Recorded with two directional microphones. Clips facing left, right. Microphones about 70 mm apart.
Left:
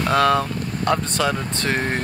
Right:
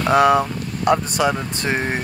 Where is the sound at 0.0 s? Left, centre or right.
Centre.